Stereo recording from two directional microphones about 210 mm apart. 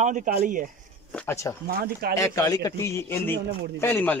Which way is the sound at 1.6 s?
45° right (ahead or behind).